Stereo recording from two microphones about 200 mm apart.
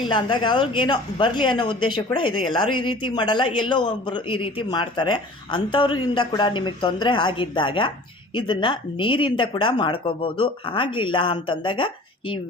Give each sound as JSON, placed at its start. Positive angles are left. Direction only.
{"t": 0.1, "sound": "speech", "side_deg": 25}